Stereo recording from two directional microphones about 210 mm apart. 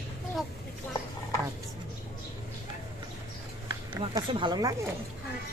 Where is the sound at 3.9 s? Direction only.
20° right (ahead or behind).